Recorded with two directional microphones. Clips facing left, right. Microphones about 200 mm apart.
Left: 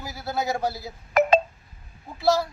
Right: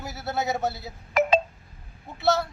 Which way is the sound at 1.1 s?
50° left (ahead or behind).